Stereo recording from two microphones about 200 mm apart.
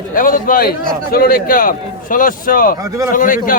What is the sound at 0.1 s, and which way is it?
A man's voice, 40° left (ahead or behind).